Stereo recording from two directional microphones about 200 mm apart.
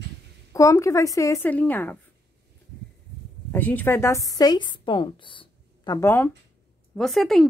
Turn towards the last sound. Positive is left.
turn(degrees=0)  # may be behind; listen again after turning